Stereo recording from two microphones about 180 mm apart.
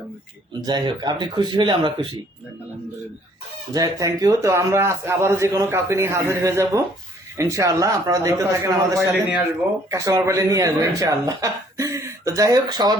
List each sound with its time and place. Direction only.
0.6 s speech: 20° right (ahead or behind)
3.7 s a man's voice: 20° right (ahead or behind)